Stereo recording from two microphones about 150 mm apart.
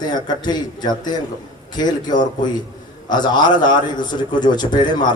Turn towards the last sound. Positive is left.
turn(degrees=30)  # may be behind; listen again after turning